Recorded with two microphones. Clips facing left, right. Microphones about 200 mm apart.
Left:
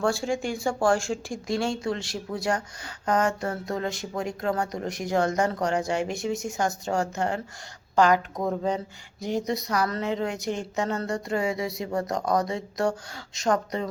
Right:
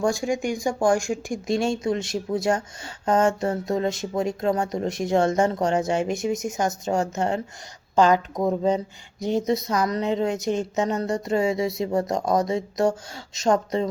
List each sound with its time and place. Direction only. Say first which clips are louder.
0.0 s speech: right 2 dB; 15° right (ahead or behind)